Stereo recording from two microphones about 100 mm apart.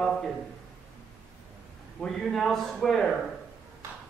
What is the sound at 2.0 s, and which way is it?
A man's voice, 5° left (ahead or behind).